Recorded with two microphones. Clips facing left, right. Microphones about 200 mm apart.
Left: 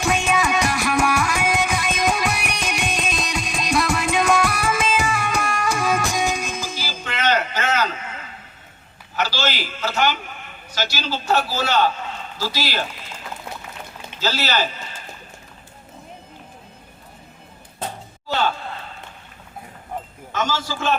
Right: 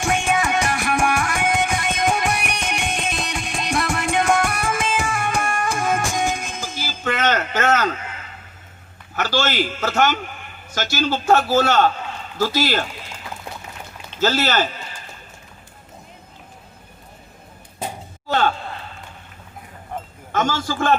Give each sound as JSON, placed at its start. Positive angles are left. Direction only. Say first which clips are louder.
{"t": 0.1, "sound": "music", "louder": "even", "side_deg": -50}
{"t": 9.1, "sound": "a man's voice", "louder": "right 3 dB", "side_deg": -50}
{"t": 14.2, "sound": "a man's voice", "louder": "right 4 dB", "side_deg": -50}
{"t": 18.3, "sound": "a sound", "louder": "right 3 dB", "side_deg": -50}
{"t": 20.3, "sound": "a man's voice", "louder": "right 3 dB", "side_deg": -50}